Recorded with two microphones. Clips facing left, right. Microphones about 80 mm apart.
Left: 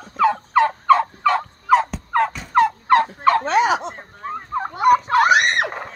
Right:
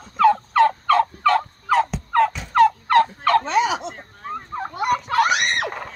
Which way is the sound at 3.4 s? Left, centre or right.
Left.